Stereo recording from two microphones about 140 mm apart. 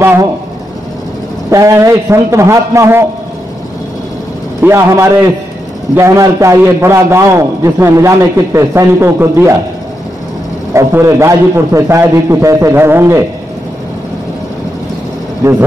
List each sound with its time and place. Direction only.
0.0 s a man's voice: 20° right (ahead or behind)
1.5 s a man's voice: 20° right (ahead or behind)
4.6 s a man's voice: 20° right (ahead or behind)
10.7 s a man's voice: 20° right (ahead or behind)